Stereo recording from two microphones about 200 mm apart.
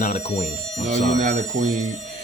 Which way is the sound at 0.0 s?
35° left (ahead or behind).